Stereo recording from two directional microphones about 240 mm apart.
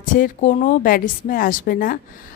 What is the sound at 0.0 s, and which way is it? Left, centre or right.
Speech, left.